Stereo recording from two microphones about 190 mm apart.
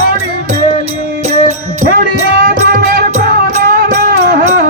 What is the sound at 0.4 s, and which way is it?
Music, 35° right (ahead or behind).